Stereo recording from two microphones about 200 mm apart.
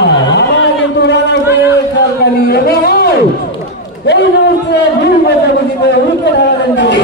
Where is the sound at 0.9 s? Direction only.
60° left (ahead or behind).